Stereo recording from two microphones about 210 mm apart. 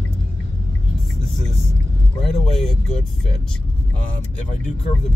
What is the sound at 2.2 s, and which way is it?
Speech, centre (ahead or behind).